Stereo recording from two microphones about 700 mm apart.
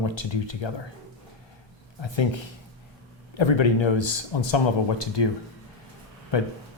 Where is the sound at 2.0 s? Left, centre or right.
Left.